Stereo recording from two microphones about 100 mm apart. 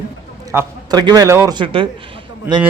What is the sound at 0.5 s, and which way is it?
Speech, 25° right (ahead or behind).